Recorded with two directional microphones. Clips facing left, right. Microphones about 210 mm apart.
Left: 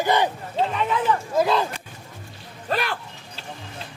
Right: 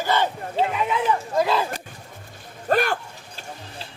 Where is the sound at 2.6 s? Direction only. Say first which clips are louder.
Right 5 dB; 45° right (ahead or behind).